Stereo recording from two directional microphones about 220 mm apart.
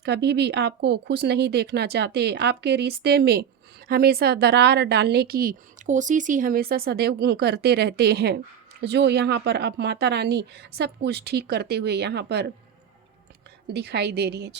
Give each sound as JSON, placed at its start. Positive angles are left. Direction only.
{"t": 0.0, "sound": "a woman's voice", "side_deg": -50}
{"t": 13.7, "sound": "a woman's voice", "side_deg": -50}